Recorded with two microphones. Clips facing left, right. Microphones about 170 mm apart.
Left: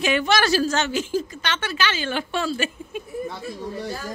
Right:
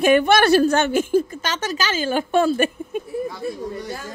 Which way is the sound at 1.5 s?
40° right (ahead or behind).